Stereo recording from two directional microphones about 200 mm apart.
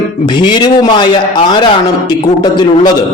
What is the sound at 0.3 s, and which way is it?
A man's voice, 20° left (ahead or behind).